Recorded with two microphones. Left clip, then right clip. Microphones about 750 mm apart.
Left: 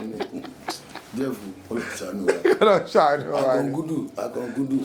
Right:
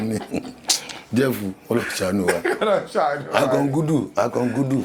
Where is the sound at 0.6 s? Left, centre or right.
Right.